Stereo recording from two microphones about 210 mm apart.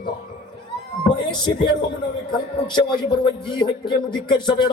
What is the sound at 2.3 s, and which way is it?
A man's voice, 20° left (ahead or behind).